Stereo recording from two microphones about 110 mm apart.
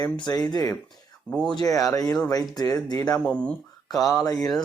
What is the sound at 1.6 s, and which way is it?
Speech, 35° left (ahead or behind).